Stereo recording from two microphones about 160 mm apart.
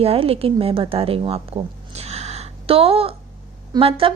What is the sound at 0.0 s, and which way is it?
A woman's voice, 40° right (ahead or behind).